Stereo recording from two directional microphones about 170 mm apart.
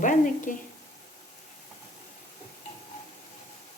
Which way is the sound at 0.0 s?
50° left (ahead or behind).